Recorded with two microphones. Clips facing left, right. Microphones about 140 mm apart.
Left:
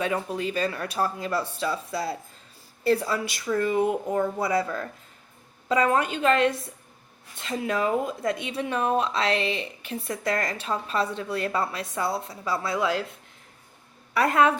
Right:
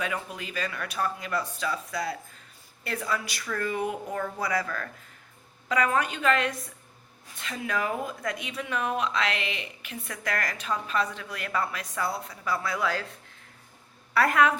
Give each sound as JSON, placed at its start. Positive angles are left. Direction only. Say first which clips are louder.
{"t": 0.0, "sound": "speech", "louder": "left 6 dB", "side_deg": 30}
{"t": 14.1, "sound": "a woman's voice", "louder": "left 2 dB", "side_deg": 20}